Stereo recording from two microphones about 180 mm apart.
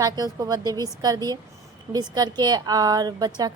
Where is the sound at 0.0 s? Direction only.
20° right (ahead or behind).